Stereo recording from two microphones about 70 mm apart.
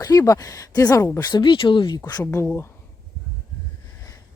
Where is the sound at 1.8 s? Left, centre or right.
Left.